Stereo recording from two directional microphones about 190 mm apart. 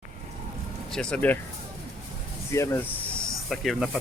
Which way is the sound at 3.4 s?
Centre (ahead or behind).